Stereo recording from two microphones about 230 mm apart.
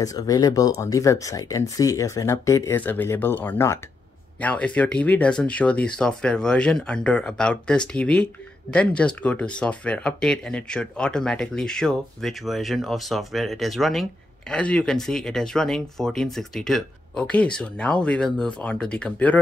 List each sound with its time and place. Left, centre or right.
0.0 s speech: centre